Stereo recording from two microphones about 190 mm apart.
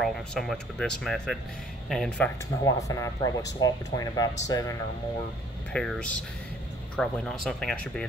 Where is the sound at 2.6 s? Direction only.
15° left (ahead or behind).